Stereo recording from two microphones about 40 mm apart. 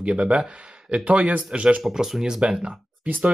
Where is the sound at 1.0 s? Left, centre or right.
Right.